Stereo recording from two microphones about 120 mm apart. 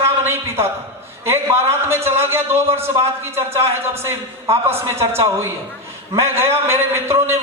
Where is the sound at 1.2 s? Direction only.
20° right (ahead or behind).